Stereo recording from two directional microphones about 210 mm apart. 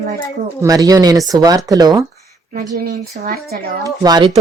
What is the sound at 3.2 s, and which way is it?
Speech, 40° right (ahead or behind).